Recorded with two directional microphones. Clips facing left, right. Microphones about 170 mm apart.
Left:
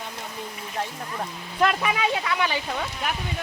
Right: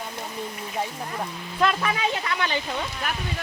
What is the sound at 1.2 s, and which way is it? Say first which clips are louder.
Speech: left 1 dB; 10° left (ahead or behind).